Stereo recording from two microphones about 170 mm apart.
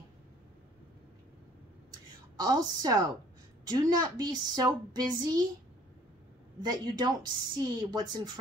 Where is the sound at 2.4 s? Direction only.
25° right (ahead or behind).